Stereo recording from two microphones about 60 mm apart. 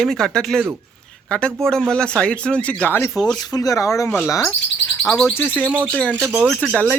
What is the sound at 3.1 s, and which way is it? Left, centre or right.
Speech, centre.